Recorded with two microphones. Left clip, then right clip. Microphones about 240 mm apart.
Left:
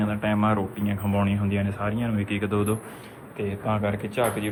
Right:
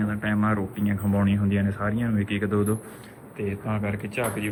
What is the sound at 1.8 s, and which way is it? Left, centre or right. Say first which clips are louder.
Speech: right 1 dB; centre.